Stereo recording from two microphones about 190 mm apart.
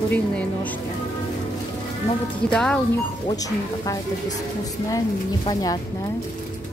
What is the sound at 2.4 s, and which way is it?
Speech, 5° left (ahead or behind).